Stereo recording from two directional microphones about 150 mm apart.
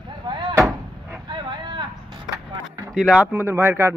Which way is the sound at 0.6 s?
15° right (ahead or behind).